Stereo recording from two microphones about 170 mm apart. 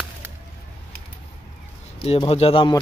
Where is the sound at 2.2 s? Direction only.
35° left (ahead or behind).